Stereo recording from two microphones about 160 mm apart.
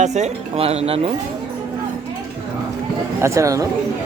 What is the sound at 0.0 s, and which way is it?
Speech, 45° right (ahead or behind).